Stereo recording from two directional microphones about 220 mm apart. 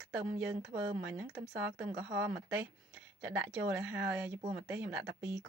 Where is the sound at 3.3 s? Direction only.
50° right (ahead or behind).